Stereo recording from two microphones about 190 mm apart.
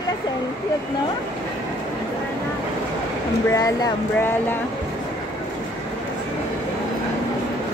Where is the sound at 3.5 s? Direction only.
15° left (ahead or behind).